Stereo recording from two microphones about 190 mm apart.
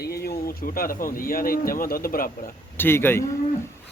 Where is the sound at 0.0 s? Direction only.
55° left (ahead or behind).